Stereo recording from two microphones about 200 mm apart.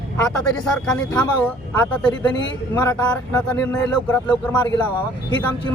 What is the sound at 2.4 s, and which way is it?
A man's voice, 15° left (ahead or behind).